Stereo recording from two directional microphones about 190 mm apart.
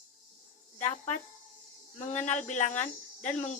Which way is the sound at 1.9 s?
40° left (ahead or behind).